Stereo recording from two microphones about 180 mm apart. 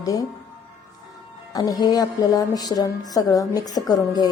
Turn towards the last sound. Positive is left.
turn(degrees=20)  # may be behind; listen again after turning